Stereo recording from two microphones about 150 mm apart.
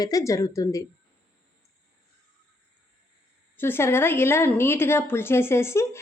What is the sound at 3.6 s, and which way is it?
A woman's voice, 15° left (ahead or behind).